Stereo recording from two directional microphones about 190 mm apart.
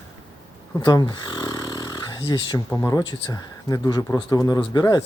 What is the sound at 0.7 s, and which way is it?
Speech, 20° left (ahead or behind).